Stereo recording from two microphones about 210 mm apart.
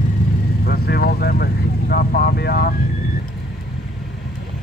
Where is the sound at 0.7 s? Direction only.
45° left (ahead or behind).